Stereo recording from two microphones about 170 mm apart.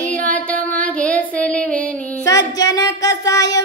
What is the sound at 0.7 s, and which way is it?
Female singing, 10° left (ahead or behind).